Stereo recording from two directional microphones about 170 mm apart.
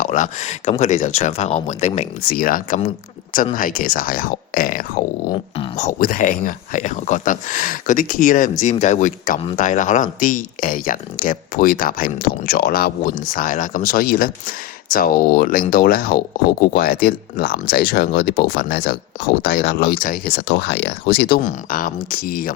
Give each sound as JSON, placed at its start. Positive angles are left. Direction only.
{"t": 0.0, "sound": "speech", "side_deg": 50}
{"t": 2.2, "sound": "speech", "side_deg": 55}
{"t": 5.3, "sound": "speech", "side_deg": 35}
{"t": 5.9, "sound": "speech", "side_deg": 55}